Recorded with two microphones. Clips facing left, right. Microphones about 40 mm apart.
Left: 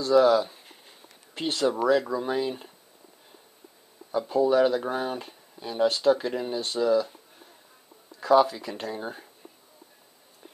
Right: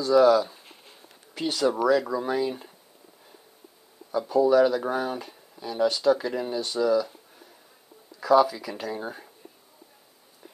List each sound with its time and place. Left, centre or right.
0.0 s speech: centre
2.0 s speech: centre
4.2 s speech: centre
8.2 s speech: centre
8.9 s speech: centre